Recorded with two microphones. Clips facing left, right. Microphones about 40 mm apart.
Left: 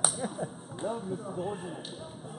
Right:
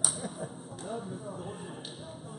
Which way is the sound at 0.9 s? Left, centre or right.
Left.